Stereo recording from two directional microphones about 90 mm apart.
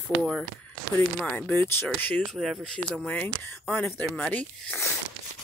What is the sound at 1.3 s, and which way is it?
Speech, 15° left (ahead or behind).